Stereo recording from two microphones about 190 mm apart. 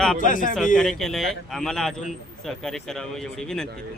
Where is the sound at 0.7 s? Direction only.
Centre (ahead or behind).